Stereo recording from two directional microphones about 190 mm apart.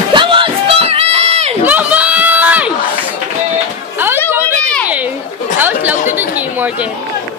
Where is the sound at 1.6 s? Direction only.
10° right (ahead or behind).